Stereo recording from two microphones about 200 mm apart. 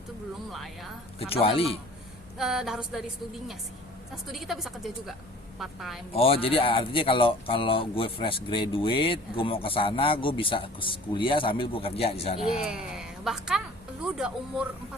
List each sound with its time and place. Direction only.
0.5 s a woman's voice: centre (ahead or behind)
1.2 s speech: 30° left (ahead or behind)
2.4 s a woman's voice: centre (ahead or behind)
4.1 s a woman's voice: centre (ahead or behind)
6.1 s speech: 30° left (ahead or behind)
12.4 s a woman's voice: centre (ahead or behind)